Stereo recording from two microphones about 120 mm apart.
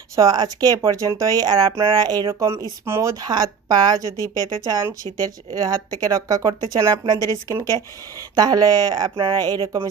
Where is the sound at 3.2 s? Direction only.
35° right (ahead or behind).